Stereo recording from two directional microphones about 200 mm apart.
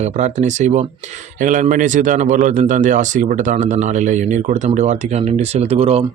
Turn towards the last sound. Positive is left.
turn(degrees=-30)  # may be behind; listen again after turning